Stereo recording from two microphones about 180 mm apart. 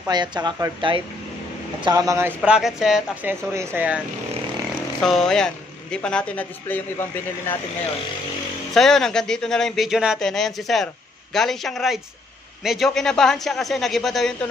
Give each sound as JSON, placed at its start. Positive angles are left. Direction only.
{"t": 0.1, "sound": "speech", "side_deg": -25}
{"t": 5.0, "sound": "a man's voice", "side_deg": 5}
{"t": 8.7, "sound": "a man's voice", "side_deg": 0}